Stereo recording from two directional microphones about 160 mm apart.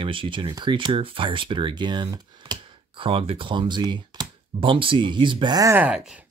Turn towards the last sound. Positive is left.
turn(degrees=-5)  # may be behind; listen again after turning